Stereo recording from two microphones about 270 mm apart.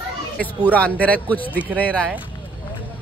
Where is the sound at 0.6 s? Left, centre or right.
Centre.